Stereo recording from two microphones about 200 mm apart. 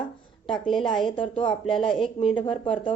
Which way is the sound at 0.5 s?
Centre (ahead or behind).